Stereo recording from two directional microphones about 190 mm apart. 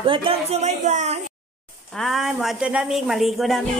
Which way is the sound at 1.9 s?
Centre (ahead or behind).